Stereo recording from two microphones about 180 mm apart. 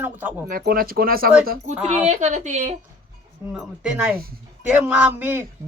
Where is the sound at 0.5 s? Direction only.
55° right (ahead or behind).